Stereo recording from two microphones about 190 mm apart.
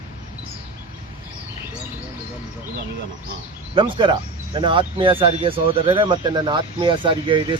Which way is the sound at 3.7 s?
25° right (ahead or behind).